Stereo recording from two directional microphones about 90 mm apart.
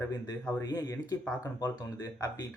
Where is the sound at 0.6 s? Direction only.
45° left (ahead or behind).